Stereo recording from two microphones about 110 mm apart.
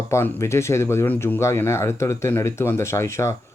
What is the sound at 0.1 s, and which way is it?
Speech, 25° left (ahead or behind).